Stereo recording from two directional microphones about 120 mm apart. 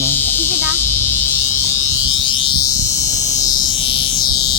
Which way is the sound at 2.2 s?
45° left (ahead or behind).